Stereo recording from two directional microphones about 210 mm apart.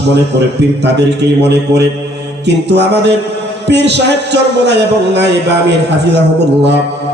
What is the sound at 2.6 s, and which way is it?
Mantra, 55° right (ahead or behind).